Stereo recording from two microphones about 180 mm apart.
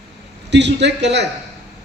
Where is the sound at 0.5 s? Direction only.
75° right (ahead or behind).